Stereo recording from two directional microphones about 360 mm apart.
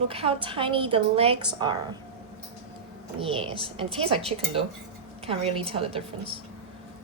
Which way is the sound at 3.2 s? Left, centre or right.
Centre.